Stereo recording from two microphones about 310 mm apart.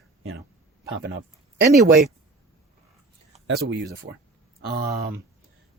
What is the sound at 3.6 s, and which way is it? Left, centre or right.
Speech, right.